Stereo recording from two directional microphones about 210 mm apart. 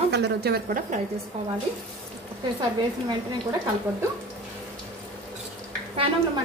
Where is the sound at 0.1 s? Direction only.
50° right (ahead or behind).